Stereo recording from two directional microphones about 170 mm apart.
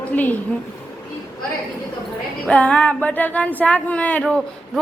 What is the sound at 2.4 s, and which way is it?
Speech, 5° left (ahead or behind).